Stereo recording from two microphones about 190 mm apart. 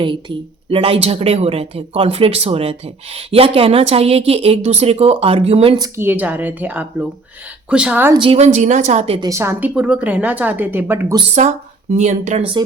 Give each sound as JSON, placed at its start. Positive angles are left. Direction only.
{"t": 0.0, "sound": "a woman's voice", "side_deg": -25}
{"t": 5.7, "sound": "a woman's voice", "side_deg": -15}
{"t": 8.2, "sound": "speech", "side_deg": -35}
{"t": 9.2, "sound": "a woman's voice", "side_deg": -15}
{"t": 11.3, "sound": "speech", "side_deg": -40}